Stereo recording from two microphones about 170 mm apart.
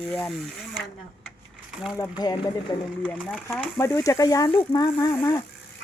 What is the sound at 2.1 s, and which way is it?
Speech, 25° left (ahead or behind).